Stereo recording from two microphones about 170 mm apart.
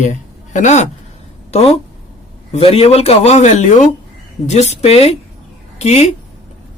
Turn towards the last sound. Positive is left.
turn(degrees=40)  # may be behind; listen again after turning